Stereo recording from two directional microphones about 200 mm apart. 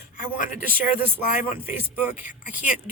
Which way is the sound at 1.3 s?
10° right (ahead or behind).